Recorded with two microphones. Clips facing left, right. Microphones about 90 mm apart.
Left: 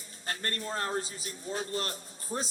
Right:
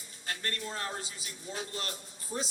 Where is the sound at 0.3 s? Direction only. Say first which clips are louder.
Left 2 dB; 40° left (ahead or behind).